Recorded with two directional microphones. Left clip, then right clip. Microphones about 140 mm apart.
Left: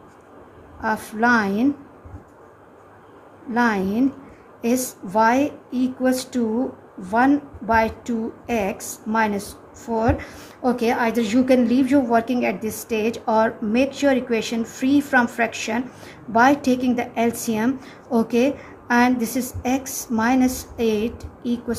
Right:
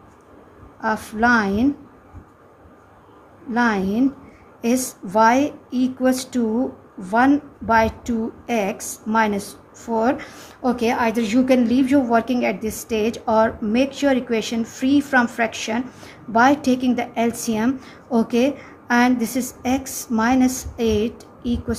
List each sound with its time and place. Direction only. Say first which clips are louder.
0.7 s a woman's voice: right 1 dB; 20° right (ahead or behind)
3.5 s a woman's voice: right 1 dB; 20° right (ahead or behind)